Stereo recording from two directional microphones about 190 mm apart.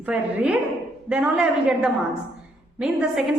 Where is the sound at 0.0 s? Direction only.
5° right (ahead or behind).